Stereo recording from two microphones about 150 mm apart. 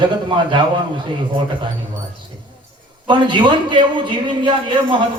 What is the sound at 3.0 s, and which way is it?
A man's voice, 30° right (ahead or behind).